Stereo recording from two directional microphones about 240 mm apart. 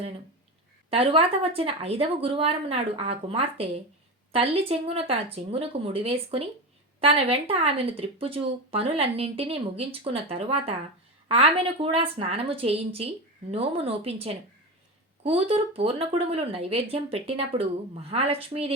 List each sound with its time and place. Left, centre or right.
0.9 s speech: right